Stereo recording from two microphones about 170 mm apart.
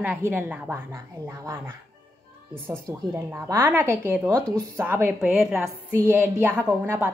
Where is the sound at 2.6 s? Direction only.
15° right (ahead or behind).